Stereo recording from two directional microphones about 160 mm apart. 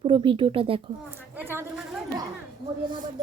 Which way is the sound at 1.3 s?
15° right (ahead or behind).